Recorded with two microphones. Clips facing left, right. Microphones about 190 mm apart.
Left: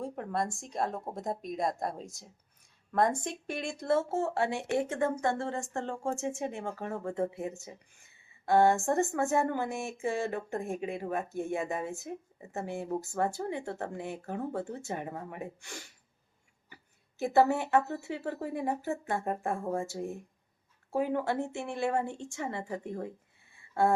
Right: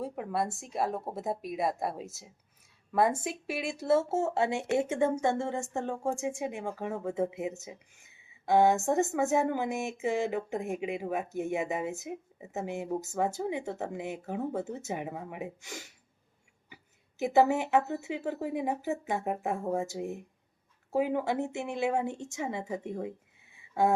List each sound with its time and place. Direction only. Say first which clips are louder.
0.0 s speech: right 1 dB; 5° right (ahead or behind)
4.2 s speech: right 2 dB; 20° right (ahead or behind)
5.1 s speech: right 2 dB; 25° right (ahead or behind)
5.7 s speech: right 2 dB; 5° right (ahead or behind)
7.1 s speech: right 1 dB; 20° right (ahead or behind)
14.2 s speech: right 2 dB; 5° right (ahead or behind)
14.8 s speech: right 1 dB; 20° right (ahead or behind)
15.0 s speech: right 1 dB; 5° right (ahead or behind)